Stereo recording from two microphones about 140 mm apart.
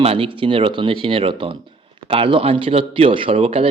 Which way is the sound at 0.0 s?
40° right (ahead or behind).